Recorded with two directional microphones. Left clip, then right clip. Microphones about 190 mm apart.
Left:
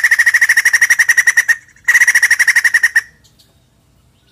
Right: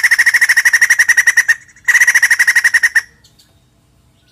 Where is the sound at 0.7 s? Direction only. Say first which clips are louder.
Right 1 dB; 10° right (ahead or behind).